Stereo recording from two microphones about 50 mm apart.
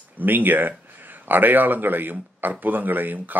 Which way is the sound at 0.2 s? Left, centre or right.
Right.